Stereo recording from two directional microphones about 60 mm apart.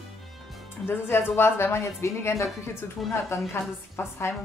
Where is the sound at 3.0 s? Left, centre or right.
Centre.